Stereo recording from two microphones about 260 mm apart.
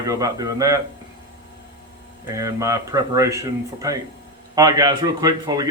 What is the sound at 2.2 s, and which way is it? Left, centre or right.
A man's voice, centre.